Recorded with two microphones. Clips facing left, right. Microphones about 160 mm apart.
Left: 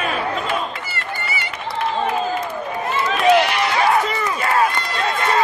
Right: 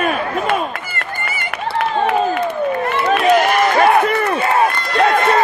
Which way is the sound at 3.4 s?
45° right (ahead or behind).